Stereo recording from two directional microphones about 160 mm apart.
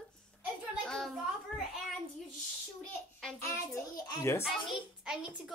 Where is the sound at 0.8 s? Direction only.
5° left (ahead or behind).